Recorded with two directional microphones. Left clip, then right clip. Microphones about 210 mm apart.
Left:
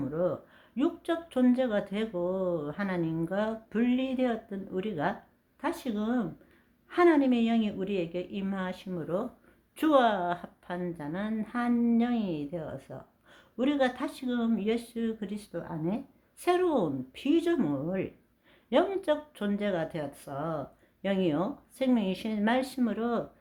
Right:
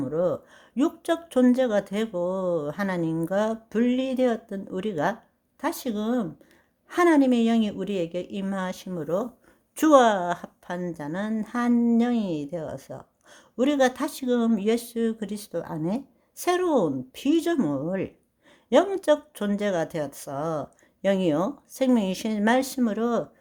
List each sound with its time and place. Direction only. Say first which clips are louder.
0.0 s a woman's voice: right 5 dB; 40° right (ahead or behind)